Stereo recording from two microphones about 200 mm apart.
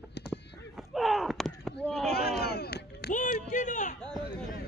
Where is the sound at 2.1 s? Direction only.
50° left (ahead or behind).